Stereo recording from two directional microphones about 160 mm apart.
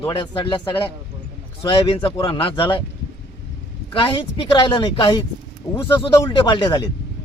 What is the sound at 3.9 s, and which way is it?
Speech, 30° left (ahead or behind).